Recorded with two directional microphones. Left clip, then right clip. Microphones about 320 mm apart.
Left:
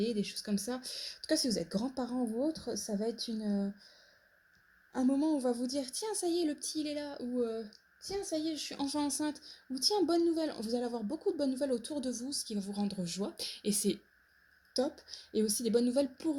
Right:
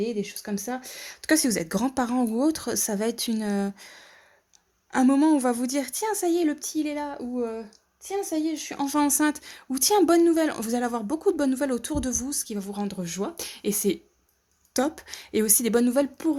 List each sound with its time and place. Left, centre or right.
0.0 s speech: centre; by 2.2 s right
2.7 s speech: right
3.0 s speech: right
4.9 s speech: right
10.9 s speech: right
11.3 s speech: right
14.8 s speech: right
15.3 s speech: right